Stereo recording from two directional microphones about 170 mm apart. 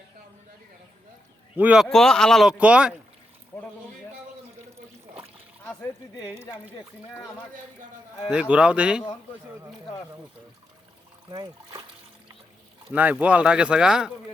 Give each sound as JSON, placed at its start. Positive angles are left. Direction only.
{"t": 1.5, "sound": "a man's voice", "side_deg": -5}
{"t": 3.5, "sound": "a sound", "side_deg": 10}
{"t": 8.3, "sound": "speech", "side_deg": -5}
{"t": 11.3, "sound": "speech", "side_deg": -25}
{"t": 12.9, "sound": "speech", "side_deg": -10}